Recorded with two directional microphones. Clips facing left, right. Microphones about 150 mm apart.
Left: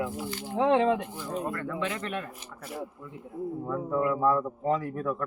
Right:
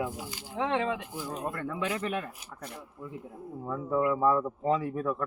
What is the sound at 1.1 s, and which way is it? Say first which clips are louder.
Speech: left 2 dB; 10° right (ahead or behind).